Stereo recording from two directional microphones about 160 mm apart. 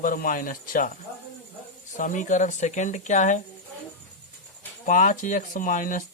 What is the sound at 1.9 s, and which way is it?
A man's voice, 55° left (ahead or behind).